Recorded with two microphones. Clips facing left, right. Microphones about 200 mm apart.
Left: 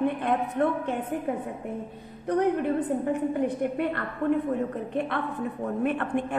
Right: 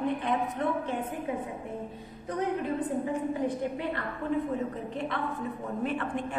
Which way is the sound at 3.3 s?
60° left (ahead or behind).